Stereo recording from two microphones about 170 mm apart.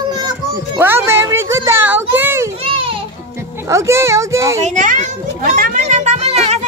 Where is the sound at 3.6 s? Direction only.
15° right (ahead or behind).